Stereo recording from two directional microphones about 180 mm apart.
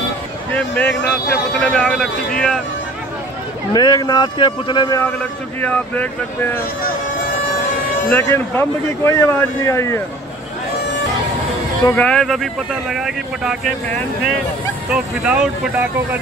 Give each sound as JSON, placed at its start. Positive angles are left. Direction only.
{"t": 0.6, "sound": "speech", "side_deg": 5}
{"t": 3.7, "sound": "a man's voice", "side_deg": 20}
{"t": 5.6, "sound": "a man's voice", "side_deg": 10}
{"t": 8.1, "sound": "a man's voice", "side_deg": 15}
{"t": 11.9, "sound": "speech", "side_deg": 5}